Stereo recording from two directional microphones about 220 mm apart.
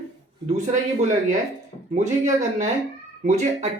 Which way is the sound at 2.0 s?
35° right (ahead or behind).